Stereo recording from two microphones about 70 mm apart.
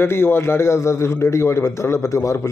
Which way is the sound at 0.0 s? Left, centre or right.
Left.